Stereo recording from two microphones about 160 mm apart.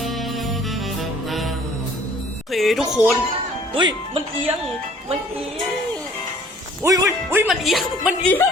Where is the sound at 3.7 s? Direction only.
30° right (ahead or behind).